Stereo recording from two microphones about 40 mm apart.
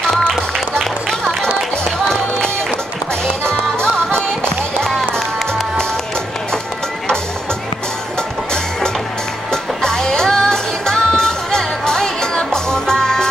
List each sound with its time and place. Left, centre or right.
0.3 s music: centre
9.5 s music: centre